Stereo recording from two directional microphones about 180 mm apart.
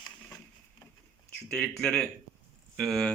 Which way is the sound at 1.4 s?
10° left (ahead or behind).